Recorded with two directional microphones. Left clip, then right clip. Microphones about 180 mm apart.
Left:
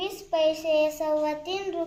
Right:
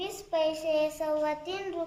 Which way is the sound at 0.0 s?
15° right (ahead or behind).